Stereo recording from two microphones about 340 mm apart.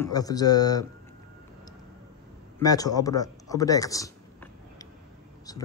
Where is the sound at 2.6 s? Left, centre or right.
Centre.